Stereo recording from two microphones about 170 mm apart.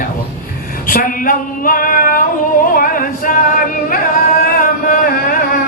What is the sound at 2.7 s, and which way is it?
Music, 55° left (ahead or behind).